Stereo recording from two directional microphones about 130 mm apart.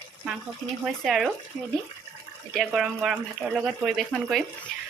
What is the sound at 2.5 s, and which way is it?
Speech, centre (ahead or behind).